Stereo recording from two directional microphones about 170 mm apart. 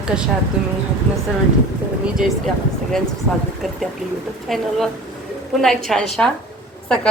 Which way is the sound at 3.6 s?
Centre (ahead or behind).